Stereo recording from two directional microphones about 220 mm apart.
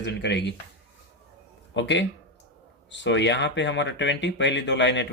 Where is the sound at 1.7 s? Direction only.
55° left (ahead or behind).